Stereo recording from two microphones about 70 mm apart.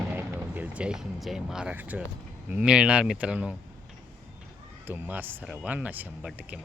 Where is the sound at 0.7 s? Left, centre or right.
Centre.